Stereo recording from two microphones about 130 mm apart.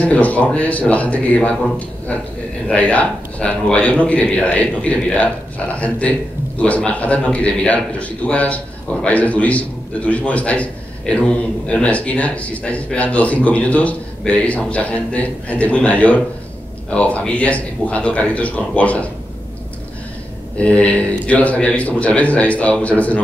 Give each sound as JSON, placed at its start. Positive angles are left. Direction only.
{"t": 0.1, "sound": "a man's voice", "side_deg": 10}
{"t": 2.7, "sound": "a man's voice", "side_deg": 10}
{"t": 20.5, "sound": "a man's voice", "side_deg": 10}